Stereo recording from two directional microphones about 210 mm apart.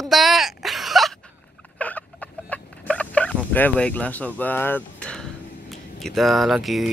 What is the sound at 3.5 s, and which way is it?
Speech, 10° left (ahead or behind).